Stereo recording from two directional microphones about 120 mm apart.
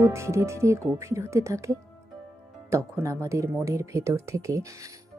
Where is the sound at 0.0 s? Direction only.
25° right (ahead or behind).